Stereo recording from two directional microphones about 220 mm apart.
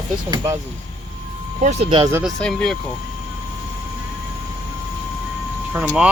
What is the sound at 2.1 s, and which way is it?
Speech, centre (ahead or behind).